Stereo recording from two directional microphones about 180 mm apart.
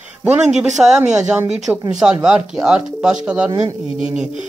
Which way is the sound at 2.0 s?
5° right (ahead or behind).